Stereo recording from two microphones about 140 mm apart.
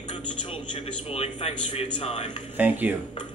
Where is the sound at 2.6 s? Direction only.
15° right (ahead or behind).